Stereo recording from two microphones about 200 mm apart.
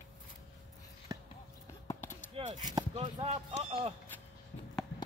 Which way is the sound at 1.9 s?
10° left (ahead or behind).